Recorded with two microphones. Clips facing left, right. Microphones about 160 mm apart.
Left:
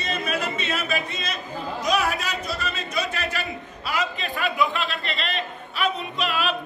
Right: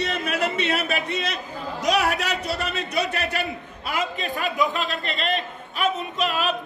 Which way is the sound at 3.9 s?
45° right (ahead or behind).